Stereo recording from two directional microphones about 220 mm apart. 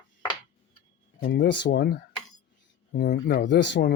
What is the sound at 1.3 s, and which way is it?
Speech, 50° left (ahead or behind).